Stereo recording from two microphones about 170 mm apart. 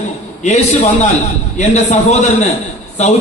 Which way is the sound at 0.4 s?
40° left (ahead or behind).